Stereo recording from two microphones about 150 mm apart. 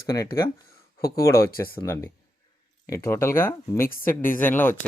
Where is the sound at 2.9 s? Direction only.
20° left (ahead or behind).